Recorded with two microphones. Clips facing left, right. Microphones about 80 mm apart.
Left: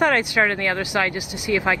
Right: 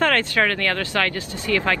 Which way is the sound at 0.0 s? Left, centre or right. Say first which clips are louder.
Left 1 dB; centre.